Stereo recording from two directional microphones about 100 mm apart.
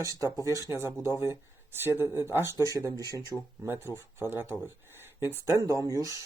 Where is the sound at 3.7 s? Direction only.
25° right (ahead or behind).